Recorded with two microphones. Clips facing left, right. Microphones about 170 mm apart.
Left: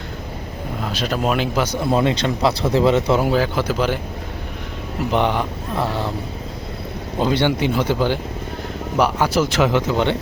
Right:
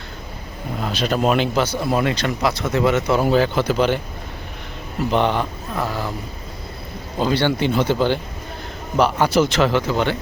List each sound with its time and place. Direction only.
0.9 s speech: centre (ahead or behind)
1.6 s speech: 20° left (ahead or behind)
3.2 s speech: 5° left (ahead or behind)
5.1 s speech: 15° left (ahead or behind)
5.7 s speech: 25° left (ahead or behind)
7.2 s speech: 20° left (ahead or behind)